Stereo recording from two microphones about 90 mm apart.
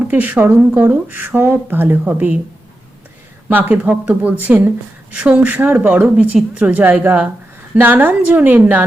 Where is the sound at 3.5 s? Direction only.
20° right (ahead or behind).